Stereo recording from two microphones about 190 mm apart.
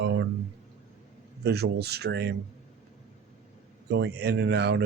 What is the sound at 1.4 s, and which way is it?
Speech, 60° right (ahead or behind).